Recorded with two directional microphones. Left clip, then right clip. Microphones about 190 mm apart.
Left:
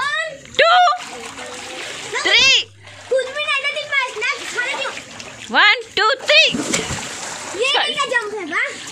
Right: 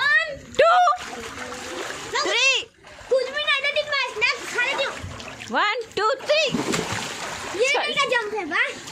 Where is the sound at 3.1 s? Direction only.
5° left (ahead or behind).